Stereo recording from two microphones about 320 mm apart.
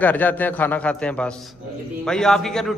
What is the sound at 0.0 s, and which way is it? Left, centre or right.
A man's voice, centre.